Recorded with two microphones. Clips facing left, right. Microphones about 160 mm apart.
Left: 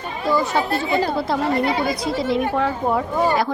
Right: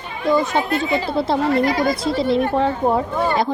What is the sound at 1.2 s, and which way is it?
A woman's voice, 25° right (ahead or behind).